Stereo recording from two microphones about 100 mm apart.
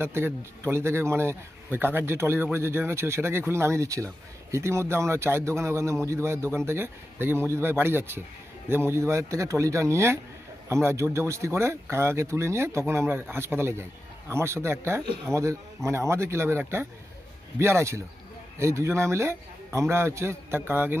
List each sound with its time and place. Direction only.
0.0 s speech: 25° right (ahead or behind)